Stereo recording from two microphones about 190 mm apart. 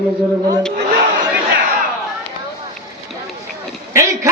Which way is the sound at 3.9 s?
15° right (ahead or behind).